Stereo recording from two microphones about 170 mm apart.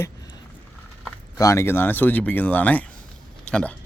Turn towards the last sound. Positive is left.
turn(degrees=5)  # may be behind; listen again after turning